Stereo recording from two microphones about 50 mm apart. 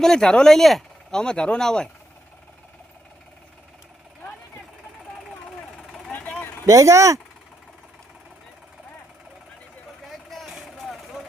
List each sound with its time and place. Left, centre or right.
0.0 s speech: centre
1.2 s speech: centre
5.5 s vehicle: centre
6.1 s vehicle: left
6.7 s speech: right
10.1 s vehicle: centre